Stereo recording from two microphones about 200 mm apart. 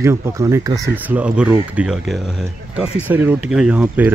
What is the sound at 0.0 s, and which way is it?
Speech, 15° right (ahead or behind).